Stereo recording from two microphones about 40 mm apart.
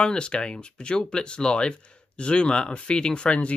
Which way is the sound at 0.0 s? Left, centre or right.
Left.